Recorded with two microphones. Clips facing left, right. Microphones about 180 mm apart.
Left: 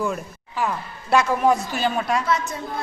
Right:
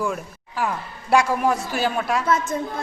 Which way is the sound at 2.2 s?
50° right (ahead or behind).